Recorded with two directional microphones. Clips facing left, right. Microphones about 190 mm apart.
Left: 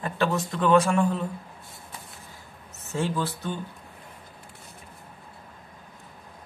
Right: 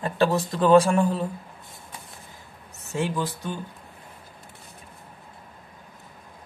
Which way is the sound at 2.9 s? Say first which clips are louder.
Right 1 dB; 15° right (ahead or behind).